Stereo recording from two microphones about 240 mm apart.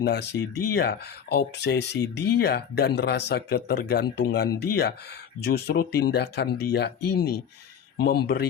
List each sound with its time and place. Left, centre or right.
0.0 s speech: left